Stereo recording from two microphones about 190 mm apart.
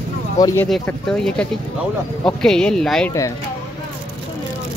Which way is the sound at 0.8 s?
5° left (ahead or behind).